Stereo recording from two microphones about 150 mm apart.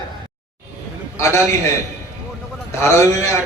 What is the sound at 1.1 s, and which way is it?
Speech, 20° left (ahead or behind).